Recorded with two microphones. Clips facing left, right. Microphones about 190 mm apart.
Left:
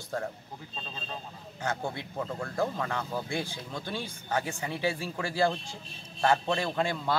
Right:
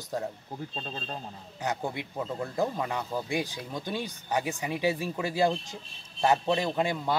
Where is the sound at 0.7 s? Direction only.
45° right (ahead or behind).